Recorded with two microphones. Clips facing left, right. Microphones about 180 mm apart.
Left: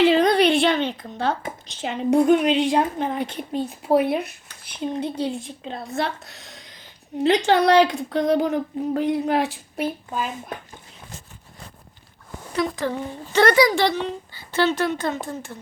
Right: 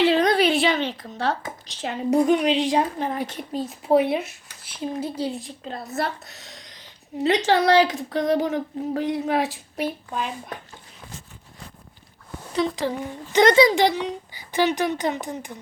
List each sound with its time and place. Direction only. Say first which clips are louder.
0.0 s a sound: left 2 dB; centre (ahead or behind)
1.6 s a woman's voice: left 2 dB; centre (ahead or behind)
13.3 s a woman's voice: right 1 dB; 20° right (ahead or behind)